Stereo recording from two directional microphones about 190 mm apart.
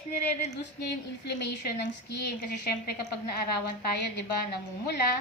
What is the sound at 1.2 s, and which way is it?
A woman's voice, 60° left (ahead or behind).